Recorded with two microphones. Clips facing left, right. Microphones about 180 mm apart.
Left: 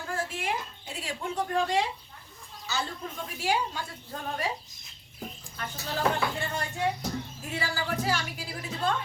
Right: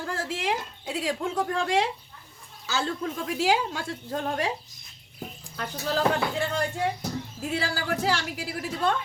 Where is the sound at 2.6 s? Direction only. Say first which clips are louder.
Right 5 dB; 90° right.